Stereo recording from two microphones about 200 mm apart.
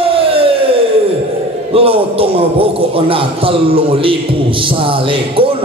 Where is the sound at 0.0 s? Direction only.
25° right (ahead or behind).